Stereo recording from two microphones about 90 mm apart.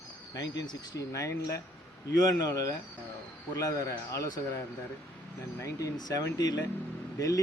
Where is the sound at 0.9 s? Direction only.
35° left (ahead or behind).